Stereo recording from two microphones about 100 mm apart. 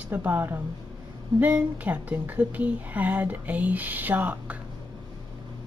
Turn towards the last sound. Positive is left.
turn(degrees=-15)  # may be behind; listen again after turning